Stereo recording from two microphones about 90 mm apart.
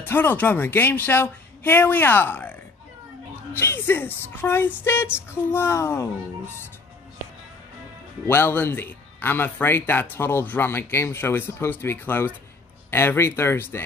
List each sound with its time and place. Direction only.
0.0 s speech: 20° left (ahead or behind)
8.3 s speech: 25° left (ahead or behind)